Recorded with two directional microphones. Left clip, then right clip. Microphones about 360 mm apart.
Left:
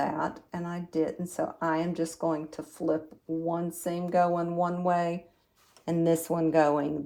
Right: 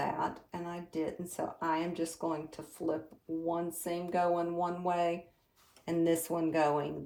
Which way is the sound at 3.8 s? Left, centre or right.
Centre.